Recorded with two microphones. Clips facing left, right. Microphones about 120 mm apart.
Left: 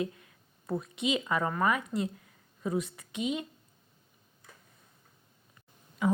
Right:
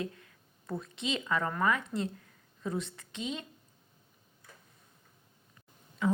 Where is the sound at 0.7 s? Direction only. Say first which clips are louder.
Left 5 dB; 15° left (ahead or behind).